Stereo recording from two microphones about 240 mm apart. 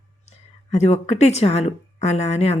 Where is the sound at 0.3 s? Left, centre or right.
Left.